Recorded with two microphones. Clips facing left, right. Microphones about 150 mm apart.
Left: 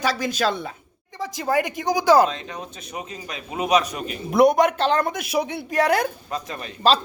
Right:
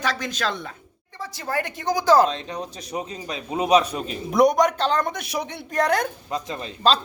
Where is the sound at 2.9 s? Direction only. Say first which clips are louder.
Right 3 dB; 30° right (ahead or behind).